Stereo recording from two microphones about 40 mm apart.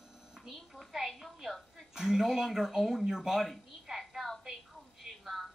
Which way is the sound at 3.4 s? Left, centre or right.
Centre.